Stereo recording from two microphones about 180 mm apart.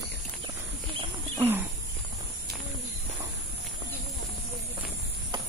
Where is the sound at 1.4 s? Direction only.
10° right (ahead or behind).